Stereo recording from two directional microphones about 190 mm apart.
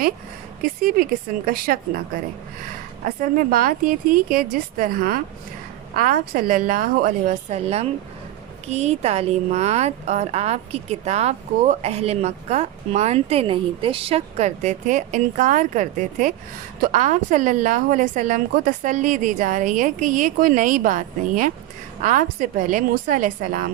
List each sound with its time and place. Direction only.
0.6 s a woman's voice: 50° right (ahead or behind)
3.0 s a woman's voice: 45° right (ahead or behind)